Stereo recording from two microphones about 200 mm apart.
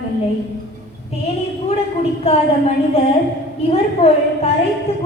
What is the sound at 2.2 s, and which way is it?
A woman's voice, 30° left (ahead or behind).